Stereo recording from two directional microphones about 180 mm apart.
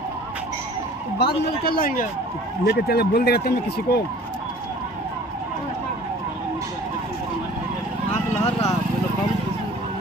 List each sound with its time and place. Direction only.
1.1 s speech: 60° left (ahead or behind)
2.6 s speech: 65° left (ahead or behind)